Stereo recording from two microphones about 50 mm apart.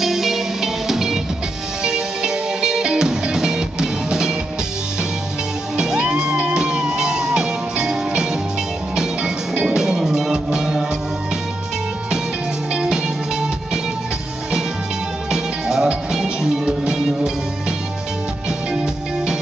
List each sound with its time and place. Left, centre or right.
0.0 s music: centre
5.8 s music: centre
12.7 s music: centre
15.3 s music: centre